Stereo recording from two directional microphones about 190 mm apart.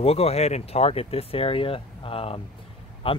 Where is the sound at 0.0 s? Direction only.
30° left (ahead or behind).